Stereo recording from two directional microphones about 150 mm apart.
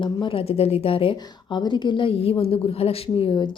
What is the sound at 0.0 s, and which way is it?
A woman's voice, 35° left (ahead or behind).